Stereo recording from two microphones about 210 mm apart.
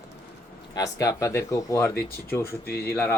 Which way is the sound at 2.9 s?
10° left (ahead or behind).